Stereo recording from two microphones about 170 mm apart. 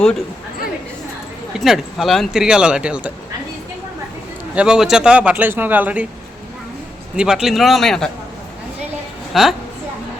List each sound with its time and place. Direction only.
1.5 s speech: centre (ahead or behind)
4.5 s a man's voice: 5° right (ahead or behind)
7.2 s speech: 5° right (ahead or behind)
9.3 s a woman's voice: centre (ahead or behind)